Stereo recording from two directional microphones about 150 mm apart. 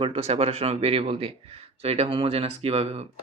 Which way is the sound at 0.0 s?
40° right (ahead or behind).